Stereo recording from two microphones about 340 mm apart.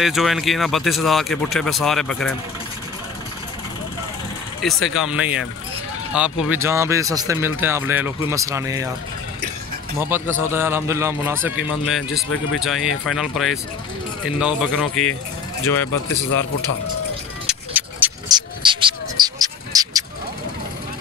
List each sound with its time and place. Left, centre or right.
0.0 s speech: centre
4.6 s speech: centre
9.9 s speech: centre
16.3 s speech: left
17.5 s a sound: centre